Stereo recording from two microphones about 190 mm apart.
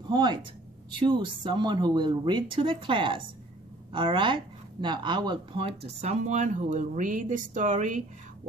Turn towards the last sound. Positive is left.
turn(degrees=-40)  # may be behind; listen again after turning